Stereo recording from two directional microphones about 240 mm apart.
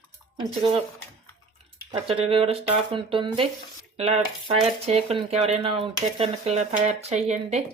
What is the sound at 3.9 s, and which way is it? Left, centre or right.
Cutlery, right.